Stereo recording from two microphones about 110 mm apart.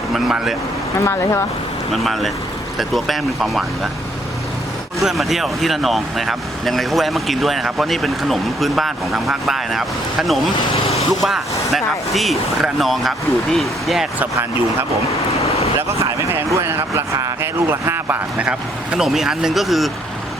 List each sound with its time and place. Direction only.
0.1 s speech: 5° right (ahead or behind)
1.0 s speech: 25° left (ahead or behind)
1.9 s speech: centre (ahead or behind)
4.9 s speech: centre (ahead or behind)
15.3 s vehicle: 70° left (ahead or behind)
15.9 s speech: 25° right (ahead or behind); by 19.9 s centre (ahead or behind)